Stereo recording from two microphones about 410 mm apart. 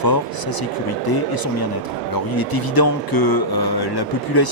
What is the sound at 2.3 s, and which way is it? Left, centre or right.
Speech, left.